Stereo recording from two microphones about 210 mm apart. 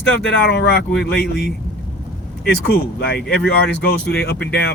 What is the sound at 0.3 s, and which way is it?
Speech, 50° left (ahead or behind).